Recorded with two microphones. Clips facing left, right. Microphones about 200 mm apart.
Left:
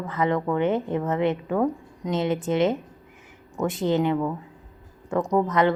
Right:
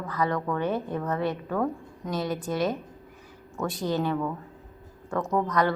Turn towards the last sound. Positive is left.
turn(degrees=20)  # may be behind; listen again after turning